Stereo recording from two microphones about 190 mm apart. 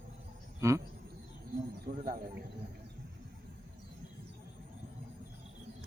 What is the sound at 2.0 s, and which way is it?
Speech, 50° right (ahead or behind).